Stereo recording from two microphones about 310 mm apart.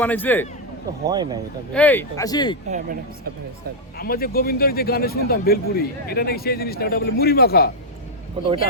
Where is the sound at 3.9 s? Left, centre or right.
Left.